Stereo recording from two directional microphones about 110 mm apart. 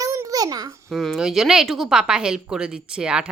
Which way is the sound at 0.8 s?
Centre (ahead or behind).